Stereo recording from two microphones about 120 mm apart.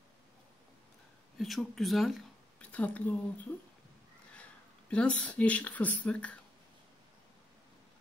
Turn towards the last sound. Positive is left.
turn(degrees=10)  # may be behind; listen again after turning